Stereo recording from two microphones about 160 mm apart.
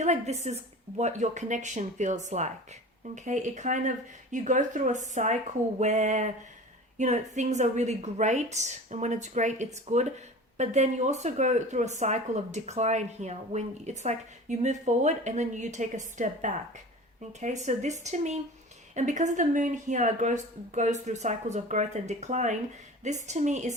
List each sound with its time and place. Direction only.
0.0 s a woman's voice: 45° right (ahead or behind)